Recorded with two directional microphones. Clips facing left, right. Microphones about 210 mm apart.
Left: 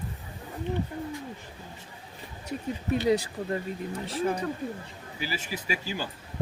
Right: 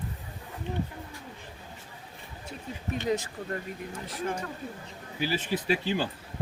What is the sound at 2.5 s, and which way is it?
Speech, 35° left (ahead or behind).